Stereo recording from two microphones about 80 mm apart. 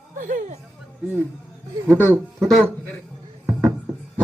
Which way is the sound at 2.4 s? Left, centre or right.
Centre.